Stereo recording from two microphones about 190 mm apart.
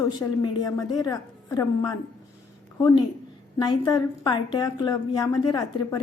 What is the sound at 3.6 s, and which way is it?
A woman's voice, 20° left (ahead or behind).